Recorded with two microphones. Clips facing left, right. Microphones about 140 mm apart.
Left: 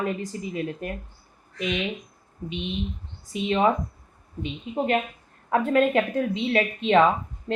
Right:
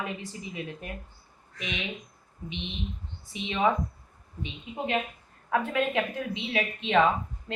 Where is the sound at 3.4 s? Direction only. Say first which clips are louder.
Left 4 dB; 45° left (ahead or behind).